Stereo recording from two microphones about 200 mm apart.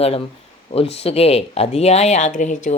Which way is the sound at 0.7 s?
30° left (ahead or behind).